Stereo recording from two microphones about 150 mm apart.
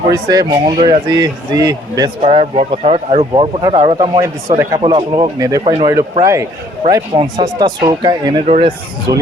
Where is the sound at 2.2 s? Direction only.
45° right (ahead or behind).